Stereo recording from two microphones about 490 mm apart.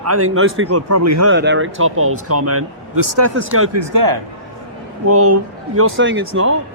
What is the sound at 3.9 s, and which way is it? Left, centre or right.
Speech, right.